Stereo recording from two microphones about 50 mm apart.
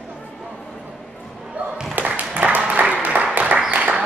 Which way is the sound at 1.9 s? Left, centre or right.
Right.